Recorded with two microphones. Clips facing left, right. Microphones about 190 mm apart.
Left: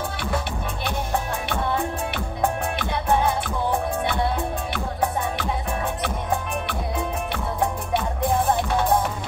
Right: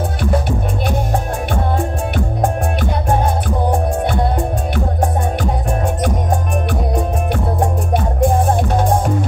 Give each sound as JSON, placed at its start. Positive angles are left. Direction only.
{"t": 0.8, "sound": "music", "side_deg": -45}
{"t": 7.6, "sound": "music", "side_deg": -45}